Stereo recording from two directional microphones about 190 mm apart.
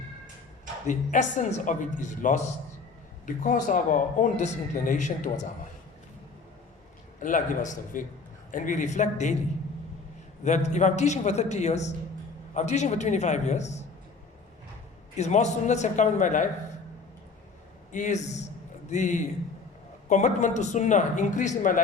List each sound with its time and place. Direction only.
0.9 s speech: 40° left (ahead or behind)
7.2 s a man's voice: 45° left (ahead or behind)
10.4 s speech: 40° left (ahead or behind)
15.1 s speech: 40° left (ahead or behind)
17.9 s speech: 40° left (ahead or behind)